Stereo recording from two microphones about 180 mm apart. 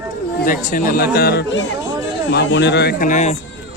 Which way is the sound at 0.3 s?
50° left (ahead or behind).